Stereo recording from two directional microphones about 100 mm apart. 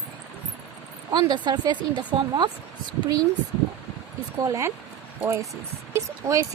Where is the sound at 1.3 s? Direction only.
45° right (ahead or behind).